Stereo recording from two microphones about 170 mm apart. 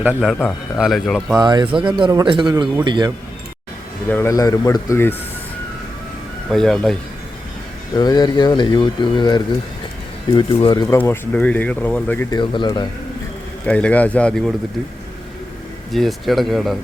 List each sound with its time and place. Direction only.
0.2 s speech: centre (ahead or behind)
1.4 s speech: 25° right (ahead or behind)
4.1 s speech: 15° left (ahead or behind)
6.5 s speech: 5° left (ahead or behind)
7.9 s speech: 25° left (ahead or behind)
10.8 s speech: 15° left (ahead or behind)
12.3 s speech: 25° left (ahead or behind)
13.7 s speech: 5° left (ahead or behind)
15.9 s speech: centre (ahead or behind)